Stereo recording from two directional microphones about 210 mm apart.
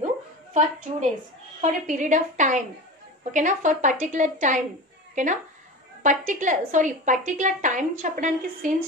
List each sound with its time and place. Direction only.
0.5 s a woman's voice: 35° right (ahead or behind)